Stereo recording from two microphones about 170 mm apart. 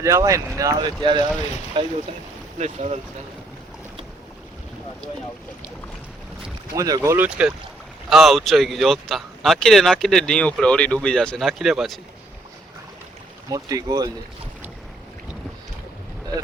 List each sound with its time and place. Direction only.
0.0 s speech: 20° right (ahead or behind)
2.6 s speech: 40° right (ahead or behind)
6.7 s speech: 20° right (ahead or behind); by 11.9 s centre (ahead or behind)
13.5 s speech: 20° right (ahead or behind)